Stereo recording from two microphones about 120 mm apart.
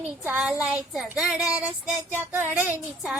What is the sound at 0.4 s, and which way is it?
Child singing, 5° right (ahead or behind).